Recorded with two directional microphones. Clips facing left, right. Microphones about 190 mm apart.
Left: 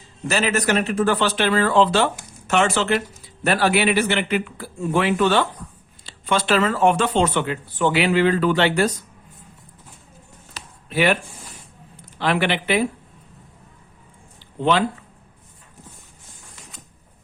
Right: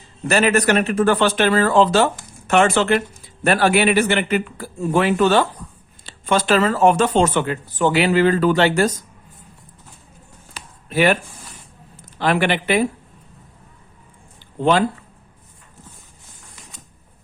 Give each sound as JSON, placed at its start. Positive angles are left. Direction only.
{"t": 0.3, "sound": "speech", "side_deg": -55}
{"t": 2.5, "sound": "speech", "side_deg": -55}
{"t": 10.8, "sound": "speech", "side_deg": -45}
{"t": 12.2, "sound": "speech", "side_deg": -45}
{"t": 14.6, "sound": "speech", "side_deg": -45}